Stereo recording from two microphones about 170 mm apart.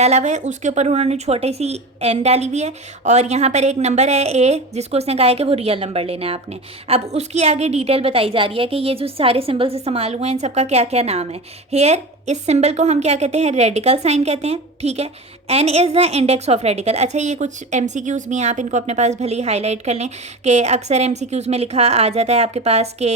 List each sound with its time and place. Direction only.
0.0 s a woman's voice: 40° right (ahead or behind)